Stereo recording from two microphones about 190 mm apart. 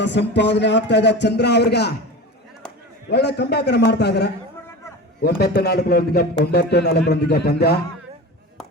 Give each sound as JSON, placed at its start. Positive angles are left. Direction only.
{"t": 0.0, "sound": "speech", "side_deg": 65}
{"t": 3.1, "sound": "speech", "side_deg": 60}